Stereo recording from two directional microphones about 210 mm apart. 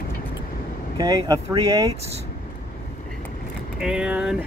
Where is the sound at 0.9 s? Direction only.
20° right (ahead or behind).